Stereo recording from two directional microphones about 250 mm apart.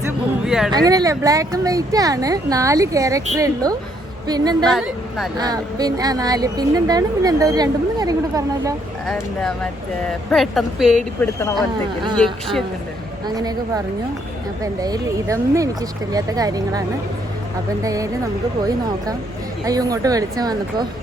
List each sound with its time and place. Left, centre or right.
0.0 s a sound: centre
0.7 s speech: centre
4.6 s speech: centre
5.4 s speech: centre
9.0 s speech: centre
13.2 s speech: centre
17.8 s speech: centre
19.6 s speech: centre